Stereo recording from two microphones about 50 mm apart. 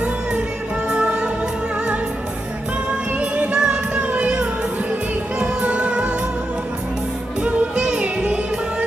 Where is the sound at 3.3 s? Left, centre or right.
Right.